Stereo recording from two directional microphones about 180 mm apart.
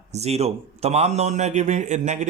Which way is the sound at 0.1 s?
35° right (ahead or behind).